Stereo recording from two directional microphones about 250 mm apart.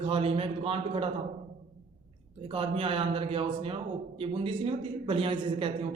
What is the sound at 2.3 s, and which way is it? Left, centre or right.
A man's voice, right.